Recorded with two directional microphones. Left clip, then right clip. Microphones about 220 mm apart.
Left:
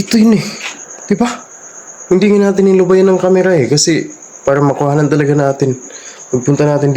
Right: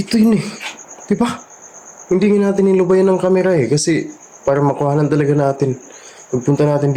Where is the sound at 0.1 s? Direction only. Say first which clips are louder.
Left 4 dB; 10° left (ahead or behind).